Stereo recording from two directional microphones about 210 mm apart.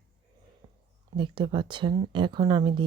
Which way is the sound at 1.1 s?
20° right (ahead or behind).